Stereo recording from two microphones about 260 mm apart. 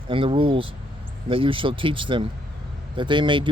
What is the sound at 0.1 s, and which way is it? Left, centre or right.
Speech, centre.